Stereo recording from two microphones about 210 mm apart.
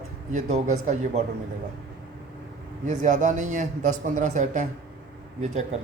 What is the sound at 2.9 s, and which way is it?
Speech, 35° right (ahead or behind).